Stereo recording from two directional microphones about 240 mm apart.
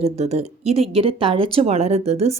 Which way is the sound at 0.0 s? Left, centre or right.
Right.